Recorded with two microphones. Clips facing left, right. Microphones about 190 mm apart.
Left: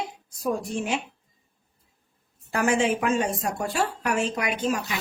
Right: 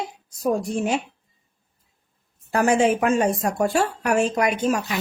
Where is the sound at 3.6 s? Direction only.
50° right (ahead or behind).